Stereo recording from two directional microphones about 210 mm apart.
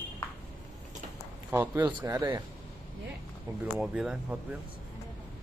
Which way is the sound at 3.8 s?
5° right (ahead or behind).